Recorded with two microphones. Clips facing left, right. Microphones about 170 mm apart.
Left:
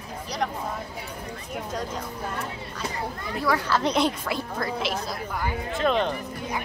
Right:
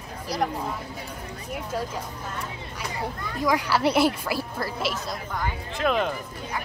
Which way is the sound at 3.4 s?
15° right (ahead or behind).